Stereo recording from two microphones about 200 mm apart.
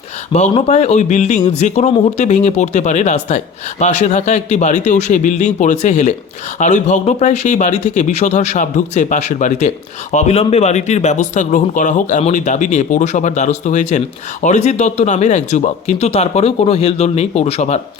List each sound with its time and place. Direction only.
0.5 s speech: 35° left (ahead or behind)